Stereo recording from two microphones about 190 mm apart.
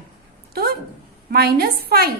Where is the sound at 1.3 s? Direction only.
55° right (ahead or behind).